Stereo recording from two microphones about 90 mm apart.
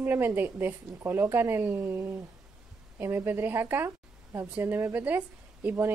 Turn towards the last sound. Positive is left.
turn(degrees=-20)  # may be behind; listen again after turning